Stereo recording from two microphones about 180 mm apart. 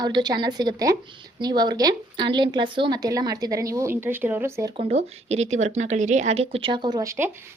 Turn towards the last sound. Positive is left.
turn(degrees=-15)  # may be behind; listen again after turning